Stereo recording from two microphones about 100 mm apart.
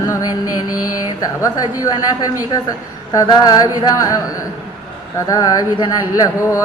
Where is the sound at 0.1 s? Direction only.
40° left (ahead or behind).